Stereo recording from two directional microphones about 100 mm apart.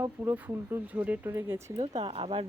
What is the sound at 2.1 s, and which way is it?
Speech, 65° right (ahead or behind).